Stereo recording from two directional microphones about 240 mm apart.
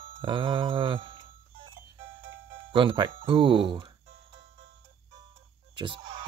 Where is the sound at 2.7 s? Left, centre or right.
Centre.